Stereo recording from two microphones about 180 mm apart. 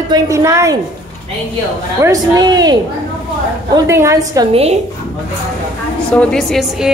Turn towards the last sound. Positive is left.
turn(degrees=0)  # may be behind; listen again after turning